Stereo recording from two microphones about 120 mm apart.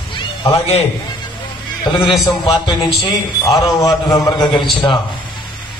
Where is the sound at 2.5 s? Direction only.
40° left (ahead or behind).